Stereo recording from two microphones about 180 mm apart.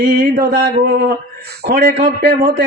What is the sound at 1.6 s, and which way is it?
Mantra, 60° right (ahead or behind).